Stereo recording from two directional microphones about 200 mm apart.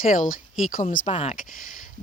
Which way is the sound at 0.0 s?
40° left (ahead or behind).